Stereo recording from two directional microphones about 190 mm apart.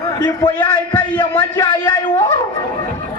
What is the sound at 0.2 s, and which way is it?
A man's voice, 20° left (ahead or behind).